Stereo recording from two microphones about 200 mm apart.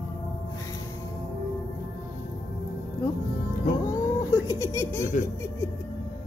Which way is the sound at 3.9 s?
15° left (ahead or behind).